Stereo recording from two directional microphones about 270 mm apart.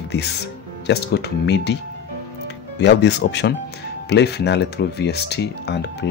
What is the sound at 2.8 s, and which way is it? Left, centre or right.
Speech, left.